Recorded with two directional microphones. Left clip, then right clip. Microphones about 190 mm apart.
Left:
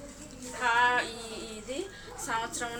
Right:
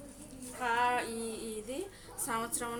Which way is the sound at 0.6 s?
55° right (ahead or behind).